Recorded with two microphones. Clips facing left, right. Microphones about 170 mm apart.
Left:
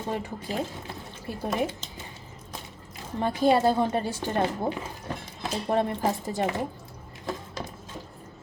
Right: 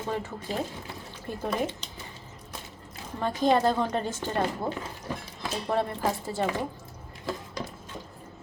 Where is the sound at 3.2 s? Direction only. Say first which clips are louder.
Left 2 dB; 10° left (ahead or behind).